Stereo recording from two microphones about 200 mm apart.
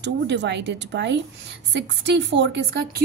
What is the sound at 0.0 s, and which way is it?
A woman's voice, 60° right (ahead or behind).